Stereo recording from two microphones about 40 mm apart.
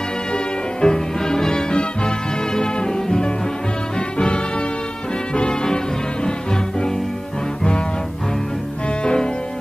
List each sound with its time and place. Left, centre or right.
0.7 s music: centre
5.3 s brass instrument: left
9.0 s music: left